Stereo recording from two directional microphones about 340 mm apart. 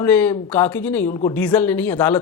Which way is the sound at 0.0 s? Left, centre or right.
Centre.